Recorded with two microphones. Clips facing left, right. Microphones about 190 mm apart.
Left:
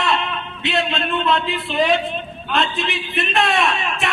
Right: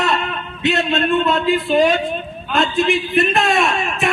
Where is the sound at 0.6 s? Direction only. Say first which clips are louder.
Right 5 dB; 45° right (ahead or behind).